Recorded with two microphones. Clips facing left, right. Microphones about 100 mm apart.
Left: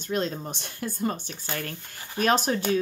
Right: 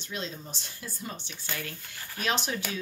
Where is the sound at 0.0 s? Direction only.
50° left (ahead or behind).